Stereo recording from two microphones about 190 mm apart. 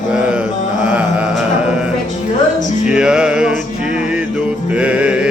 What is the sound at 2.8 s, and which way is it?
Music, 5° right (ahead or behind).